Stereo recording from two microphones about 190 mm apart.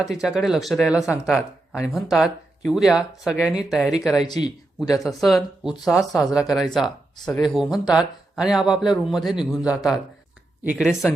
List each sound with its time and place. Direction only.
0.0 s speech: centre (ahead or behind)
4.3 s speech: 20° left (ahead or behind)
4.9 s speech: centre (ahead or behind)